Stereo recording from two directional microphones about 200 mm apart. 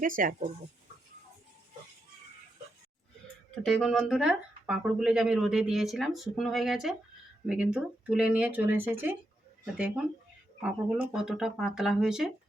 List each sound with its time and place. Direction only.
0.0 s speech: 45° right (ahead or behind)
3.6 s speech: 5° left (ahead or behind)